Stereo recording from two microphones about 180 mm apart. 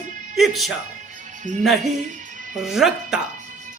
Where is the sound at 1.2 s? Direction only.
45° right (ahead or behind).